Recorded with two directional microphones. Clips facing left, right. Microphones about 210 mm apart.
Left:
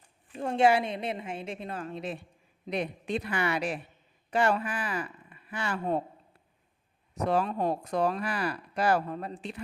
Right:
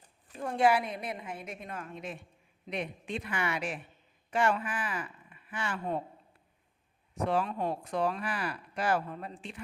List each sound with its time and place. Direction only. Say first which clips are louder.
0.3 s a woman's voice: left 3 dB; 25° left (ahead or behind)
7.1 s speech: left 3 dB; 40° left (ahead or behind)